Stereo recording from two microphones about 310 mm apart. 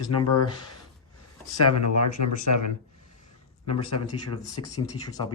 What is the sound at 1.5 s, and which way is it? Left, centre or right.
Speech, left.